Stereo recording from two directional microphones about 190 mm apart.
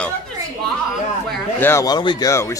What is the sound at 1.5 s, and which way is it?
Speech, 15° left (ahead or behind).